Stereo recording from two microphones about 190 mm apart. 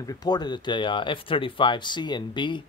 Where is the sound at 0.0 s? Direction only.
20° left (ahead or behind).